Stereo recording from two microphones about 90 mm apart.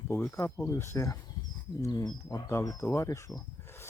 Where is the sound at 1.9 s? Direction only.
50° left (ahead or behind).